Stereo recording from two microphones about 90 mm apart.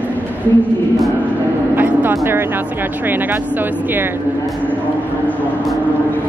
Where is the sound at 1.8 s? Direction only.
20° right (ahead or behind).